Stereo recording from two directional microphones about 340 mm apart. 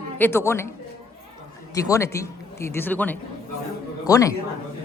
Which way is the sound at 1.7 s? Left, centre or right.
Centre.